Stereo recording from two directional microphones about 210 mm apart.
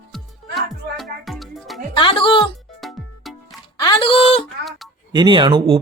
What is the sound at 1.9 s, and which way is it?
Music, 25° left (ahead or behind).